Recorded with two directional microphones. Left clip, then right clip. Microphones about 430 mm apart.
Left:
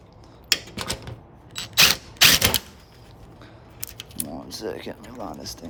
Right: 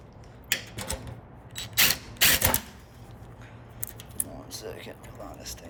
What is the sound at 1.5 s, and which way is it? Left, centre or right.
Camera, left.